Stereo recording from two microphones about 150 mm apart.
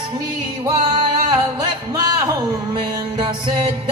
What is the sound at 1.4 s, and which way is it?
Music, 25° right (ahead or behind).